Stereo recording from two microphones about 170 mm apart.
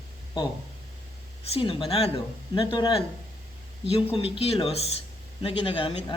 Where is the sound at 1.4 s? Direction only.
35° left (ahead or behind).